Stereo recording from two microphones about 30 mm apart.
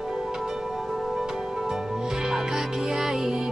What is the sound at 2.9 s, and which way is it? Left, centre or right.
Music, right.